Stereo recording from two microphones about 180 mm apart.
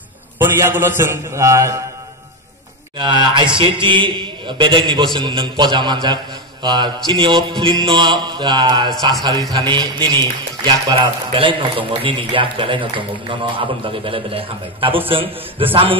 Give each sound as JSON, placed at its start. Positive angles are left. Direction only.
{"t": 0.4, "sound": "a man's voice", "side_deg": -15}
{"t": 3.0, "sound": "a man's voice", "side_deg": -25}